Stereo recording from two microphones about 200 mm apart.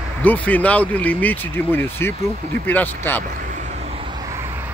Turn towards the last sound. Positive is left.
turn(degrees=10)  # may be behind; listen again after turning